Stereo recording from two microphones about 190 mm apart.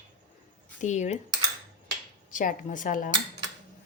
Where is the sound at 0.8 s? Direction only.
40° left (ahead or behind).